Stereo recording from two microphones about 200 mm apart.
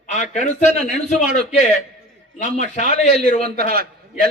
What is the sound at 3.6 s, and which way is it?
Speech, 50° right (ahead or behind).